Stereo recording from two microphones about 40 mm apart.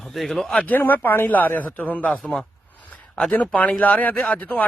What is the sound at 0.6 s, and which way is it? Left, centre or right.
Speech, left.